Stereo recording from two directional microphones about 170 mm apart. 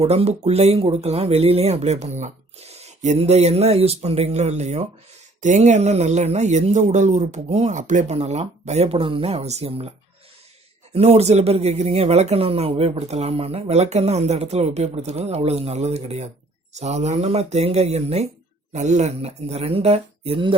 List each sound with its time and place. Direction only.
0.0 s speech: 35° right (ahead or behind)
10.9 s speech: 35° right (ahead or behind)